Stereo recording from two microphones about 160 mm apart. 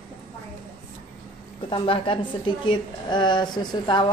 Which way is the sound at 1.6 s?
30° left (ahead or behind).